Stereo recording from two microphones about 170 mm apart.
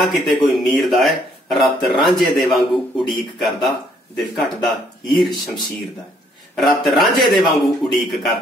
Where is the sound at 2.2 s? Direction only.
Centre (ahead or behind).